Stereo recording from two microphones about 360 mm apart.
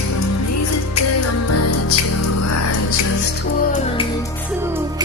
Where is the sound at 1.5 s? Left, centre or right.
Left.